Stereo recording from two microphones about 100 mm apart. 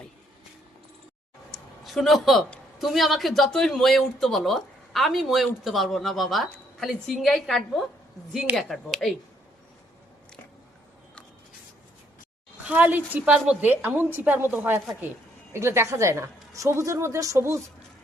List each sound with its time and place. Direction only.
1.5 s a sound: centre (ahead or behind)
2.7 s speech: centre (ahead or behind)
12.6 s a woman's voice: 15° right (ahead or behind)